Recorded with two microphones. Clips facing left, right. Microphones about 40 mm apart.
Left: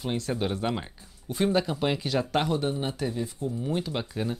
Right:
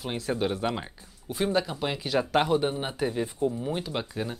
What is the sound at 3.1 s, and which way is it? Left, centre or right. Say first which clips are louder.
Speech: right 4 dB; right.